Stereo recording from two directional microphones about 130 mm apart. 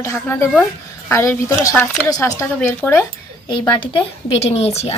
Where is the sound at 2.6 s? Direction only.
15° left (ahead or behind).